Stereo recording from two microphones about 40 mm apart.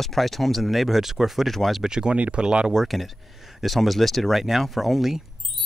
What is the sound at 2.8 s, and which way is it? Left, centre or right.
Speech, centre.